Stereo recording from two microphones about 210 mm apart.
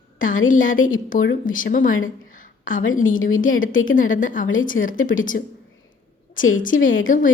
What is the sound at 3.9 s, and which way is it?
Speech, 40° left (ahead or behind).